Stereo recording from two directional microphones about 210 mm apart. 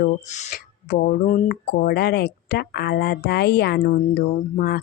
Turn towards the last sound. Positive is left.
turn(degrees=45)  # may be behind; listen again after turning